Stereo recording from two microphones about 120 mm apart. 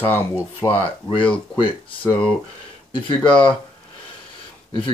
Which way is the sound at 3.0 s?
45° left (ahead or behind).